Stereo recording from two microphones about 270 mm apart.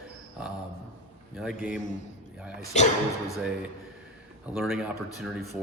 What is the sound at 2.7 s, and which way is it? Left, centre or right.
Speech, left.